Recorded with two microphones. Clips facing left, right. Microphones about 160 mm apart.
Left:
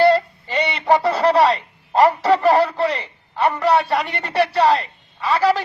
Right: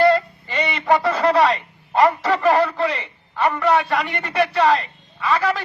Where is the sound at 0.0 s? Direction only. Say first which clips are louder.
Left 1 dB; 35° left (ahead or behind).